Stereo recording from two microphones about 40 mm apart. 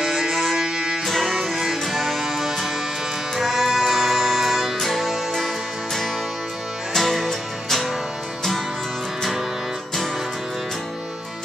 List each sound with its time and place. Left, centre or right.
0.0 s music: centre
0.3 s music: centre
0.6 s music: centre
1.0 s music: centre
6.9 s music: centre